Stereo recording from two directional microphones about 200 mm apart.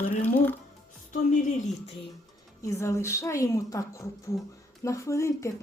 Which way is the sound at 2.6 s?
15° left (ahead or behind).